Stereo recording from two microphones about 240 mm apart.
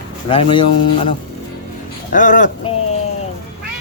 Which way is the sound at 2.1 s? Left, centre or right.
Left.